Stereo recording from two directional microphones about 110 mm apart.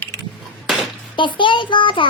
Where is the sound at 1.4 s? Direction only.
50° left (ahead or behind).